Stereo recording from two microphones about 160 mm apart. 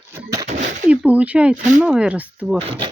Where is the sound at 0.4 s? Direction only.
50° right (ahead or behind).